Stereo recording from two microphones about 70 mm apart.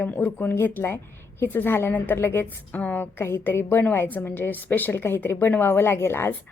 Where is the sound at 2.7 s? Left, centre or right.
Left.